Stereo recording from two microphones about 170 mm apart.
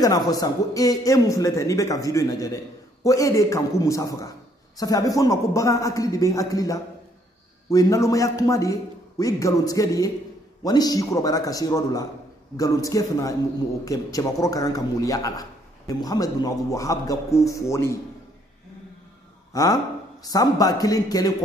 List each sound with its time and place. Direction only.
0.0 s a man's voice: 20° left (ahead or behind)
19.5 s a man's voice: 20° left (ahead or behind)